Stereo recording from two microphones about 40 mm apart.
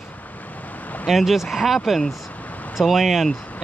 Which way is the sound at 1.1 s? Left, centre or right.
Centre.